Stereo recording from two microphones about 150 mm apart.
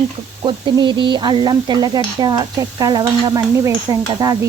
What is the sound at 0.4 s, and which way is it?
Speech, 30° right (ahead or behind).